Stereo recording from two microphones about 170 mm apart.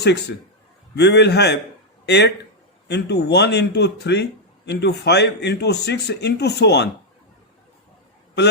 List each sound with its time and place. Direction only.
0.0 s a man's voice: 80° left